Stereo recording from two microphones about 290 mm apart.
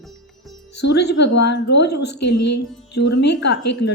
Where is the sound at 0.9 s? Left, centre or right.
Left.